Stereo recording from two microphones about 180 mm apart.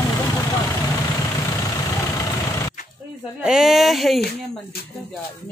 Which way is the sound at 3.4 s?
Centre (ahead or behind).